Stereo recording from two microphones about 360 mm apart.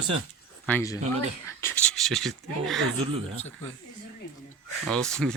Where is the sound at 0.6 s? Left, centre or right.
Centre.